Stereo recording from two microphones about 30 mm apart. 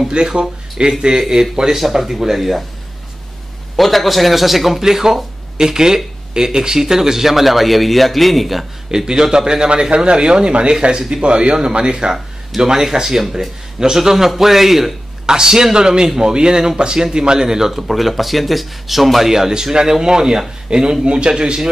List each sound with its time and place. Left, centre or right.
0.1 s speech: right; by 2.5 s centre
3.7 s a man's voice: centre
8.9 s speech: right
12.5 s speech: centre
15.2 s speech: right; by 19.3 s centre
19.3 s speech: centre